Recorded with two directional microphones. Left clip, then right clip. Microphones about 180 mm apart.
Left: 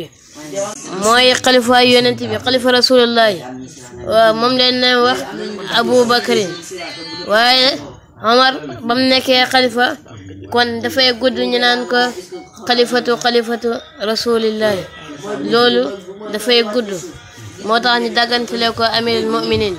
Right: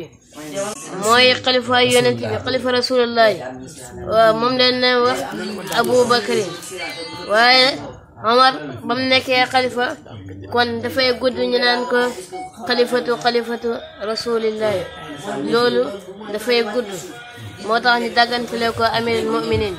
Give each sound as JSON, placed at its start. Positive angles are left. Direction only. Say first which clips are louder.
{"t": 0.9, "sound": "a woman's voice", "louder": "left 2 dB", "side_deg": 35}
{"t": 10.5, "sound": "a woman's voice", "louder": "left 3 dB", "side_deg": 25}